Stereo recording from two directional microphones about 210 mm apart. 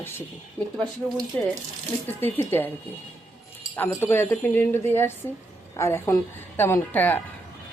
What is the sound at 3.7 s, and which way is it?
Speech, 10° left (ahead or behind).